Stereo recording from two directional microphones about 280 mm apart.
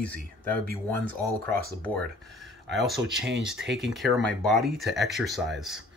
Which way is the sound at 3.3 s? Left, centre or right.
Right.